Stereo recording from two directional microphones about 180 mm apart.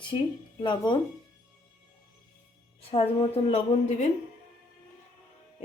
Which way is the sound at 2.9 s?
30° left (ahead or behind).